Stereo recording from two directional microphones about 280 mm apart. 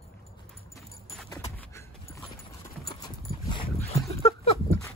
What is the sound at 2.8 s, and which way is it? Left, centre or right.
Dog, centre.